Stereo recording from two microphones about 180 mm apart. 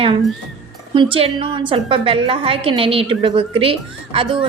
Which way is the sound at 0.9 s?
30° right (ahead or behind).